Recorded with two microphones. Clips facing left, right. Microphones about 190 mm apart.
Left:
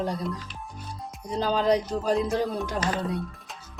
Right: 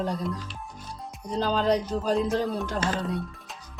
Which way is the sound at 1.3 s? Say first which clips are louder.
Left 1 dB; 10° left (ahead or behind).